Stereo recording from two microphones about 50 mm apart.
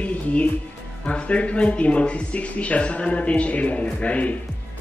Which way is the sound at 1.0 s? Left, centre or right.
Left.